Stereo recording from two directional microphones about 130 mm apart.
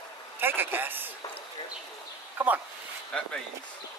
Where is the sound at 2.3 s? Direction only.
15° right (ahead or behind).